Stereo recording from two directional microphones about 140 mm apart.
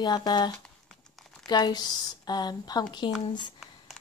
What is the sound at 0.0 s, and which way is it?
Speech, 30° left (ahead or behind).